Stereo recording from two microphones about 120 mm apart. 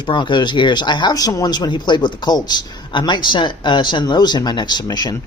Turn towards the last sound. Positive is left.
turn(degrees=35)  # may be behind; listen again after turning